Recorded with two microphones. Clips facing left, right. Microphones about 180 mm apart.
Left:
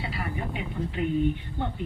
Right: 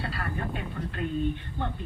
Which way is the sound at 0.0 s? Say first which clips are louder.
Left 1 dB; 15° left (ahead or behind).